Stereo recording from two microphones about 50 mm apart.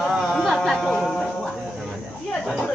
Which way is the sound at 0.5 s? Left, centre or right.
Centre.